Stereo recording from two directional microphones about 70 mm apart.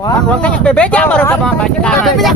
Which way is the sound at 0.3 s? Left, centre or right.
Centre.